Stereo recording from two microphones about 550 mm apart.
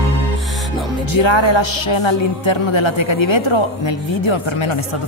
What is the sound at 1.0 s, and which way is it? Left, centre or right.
Speech, left.